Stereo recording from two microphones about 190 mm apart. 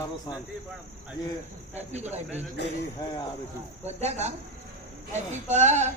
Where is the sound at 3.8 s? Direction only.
35° right (ahead or behind).